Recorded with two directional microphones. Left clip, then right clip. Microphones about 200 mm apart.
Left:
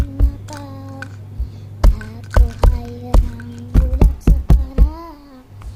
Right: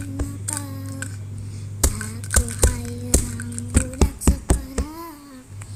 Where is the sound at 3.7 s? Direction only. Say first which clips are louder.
Left 1 dB; 10° left (ahead or behind).